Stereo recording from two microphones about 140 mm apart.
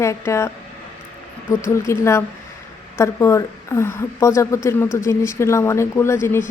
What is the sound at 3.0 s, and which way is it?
A woman's voice, 20° left (ahead or behind).